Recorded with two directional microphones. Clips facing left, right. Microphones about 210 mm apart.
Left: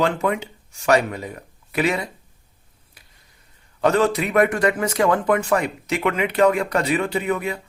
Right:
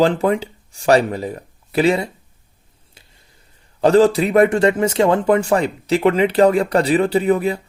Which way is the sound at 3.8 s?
30° right (ahead or behind).